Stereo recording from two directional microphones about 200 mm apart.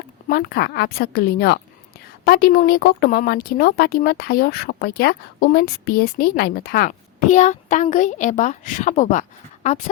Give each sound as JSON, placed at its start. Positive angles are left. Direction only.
{"t": 0.3, "sound": "a woman's voice", "side_deg": 50}